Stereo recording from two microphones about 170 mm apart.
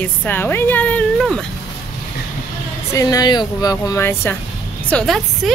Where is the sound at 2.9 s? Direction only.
20° left (ahead or behind).